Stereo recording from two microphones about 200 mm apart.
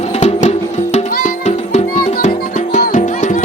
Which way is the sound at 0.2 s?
35° left (ahead or behind).